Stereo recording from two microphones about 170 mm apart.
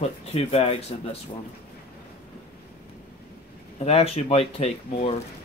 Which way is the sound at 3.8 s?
35° left (ahead or behind).